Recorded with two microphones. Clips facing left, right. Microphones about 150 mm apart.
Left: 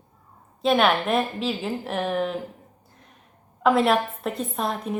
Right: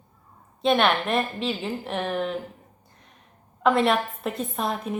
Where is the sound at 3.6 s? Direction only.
Centre (ahead or behind).